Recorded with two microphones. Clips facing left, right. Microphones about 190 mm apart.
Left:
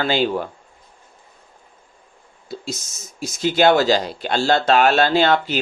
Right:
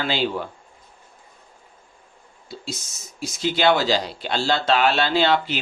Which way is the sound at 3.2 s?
45° left (ahead or behind).